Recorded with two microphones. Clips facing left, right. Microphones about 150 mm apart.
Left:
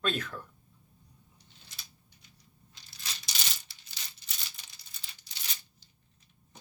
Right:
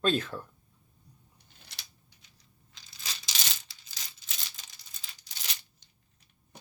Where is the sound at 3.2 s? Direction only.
90° right.